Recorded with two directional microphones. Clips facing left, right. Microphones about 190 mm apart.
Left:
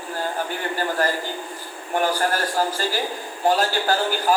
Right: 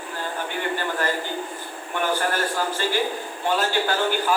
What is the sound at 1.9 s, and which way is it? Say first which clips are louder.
A man's voice: left 2 dB; 40° left (ahead or behind).